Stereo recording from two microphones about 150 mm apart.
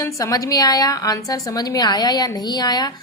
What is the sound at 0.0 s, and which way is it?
A woman's voice, 20° left (ahead or behind).